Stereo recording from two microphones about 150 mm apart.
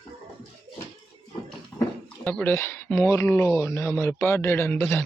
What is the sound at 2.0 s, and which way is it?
Speech, 10° left (ahead or behind).